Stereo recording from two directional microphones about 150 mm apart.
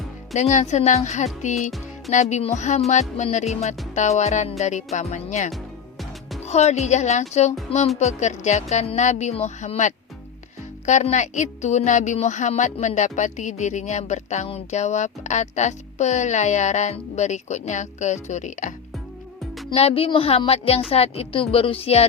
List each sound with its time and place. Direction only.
0.3 s a woman's voice: 50° left (ahead or behind)
19.7 s a woman's voice: 40° left (ahead or behind)